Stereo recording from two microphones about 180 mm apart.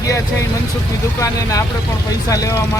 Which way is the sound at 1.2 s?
20° left (ahead or behind).